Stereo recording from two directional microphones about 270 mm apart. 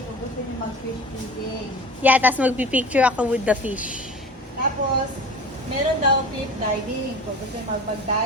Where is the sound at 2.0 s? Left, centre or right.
Centre.